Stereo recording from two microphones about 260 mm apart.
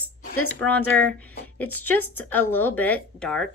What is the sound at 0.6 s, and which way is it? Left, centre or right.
A woman's voice, centre.